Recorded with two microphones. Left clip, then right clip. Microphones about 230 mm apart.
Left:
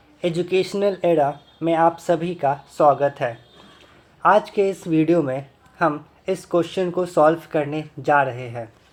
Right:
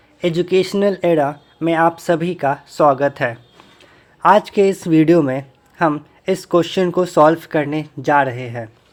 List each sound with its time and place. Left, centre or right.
0.2 s speech: right